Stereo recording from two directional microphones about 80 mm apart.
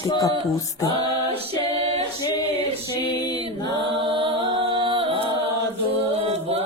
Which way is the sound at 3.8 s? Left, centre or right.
Right.